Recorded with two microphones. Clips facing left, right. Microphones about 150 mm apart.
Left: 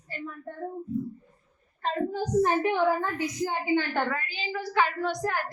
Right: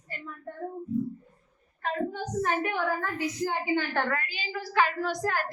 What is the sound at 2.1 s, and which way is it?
A child's voice, 35° left (ahead or behind).